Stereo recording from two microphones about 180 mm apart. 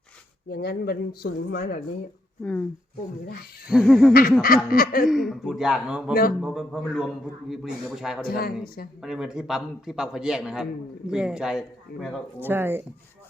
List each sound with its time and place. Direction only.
0.4 s speech: 65° left (ahead or behind)
2.4 s speech: 10° left (ahead or behind)
3.7 s a man's voice: centre (ahead or behind)
4.1 s a sound: 55° left (ahead or behind)
5.0 s a man's voice: centre (ahead or behind)
8.3 s speech: 55° left (ahead or behind)
9.0 s a man's voice: 5° right (ahead or behind)
12.4 s speech: 10° right (ahead or behind)